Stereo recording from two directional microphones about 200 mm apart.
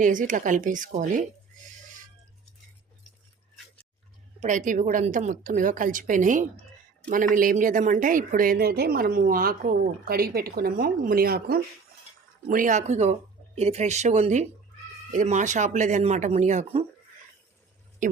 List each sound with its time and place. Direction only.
0.0 s a woman's voice: 40° right (ahead or behind)
4.4 s a woman's voice: 40° right (ahead or behind)